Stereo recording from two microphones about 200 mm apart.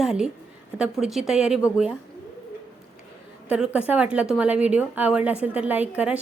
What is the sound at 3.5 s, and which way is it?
A woman's voice, 5° right (ahead or behind).